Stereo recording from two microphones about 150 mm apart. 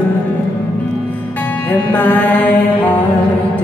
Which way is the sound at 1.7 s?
10° left (ahead or behind).